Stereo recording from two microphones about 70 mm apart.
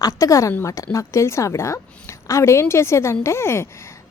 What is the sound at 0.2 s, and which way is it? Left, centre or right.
A woman's voice, left.